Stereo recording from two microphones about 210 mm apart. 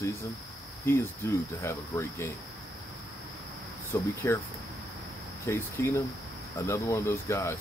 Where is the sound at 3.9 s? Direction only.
10° left (ahead or behind).